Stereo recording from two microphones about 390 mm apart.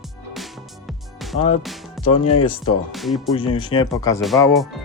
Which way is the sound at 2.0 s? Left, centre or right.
Left.